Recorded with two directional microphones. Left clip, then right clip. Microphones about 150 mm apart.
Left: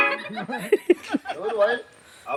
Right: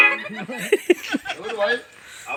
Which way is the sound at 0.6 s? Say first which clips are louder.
Right 2 dB; 5° left (ahead or behind).